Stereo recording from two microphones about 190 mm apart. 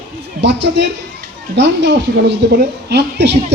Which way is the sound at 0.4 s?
65° right (ahead or behind).